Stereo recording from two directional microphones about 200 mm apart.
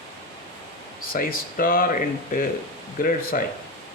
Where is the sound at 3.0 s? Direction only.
45° left (ahead or behind).